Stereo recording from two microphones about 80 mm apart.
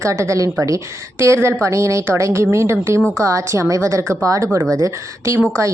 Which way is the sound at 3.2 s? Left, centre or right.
Right.